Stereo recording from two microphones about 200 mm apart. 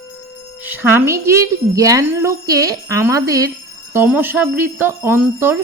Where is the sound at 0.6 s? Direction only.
10° right (ahead or behind).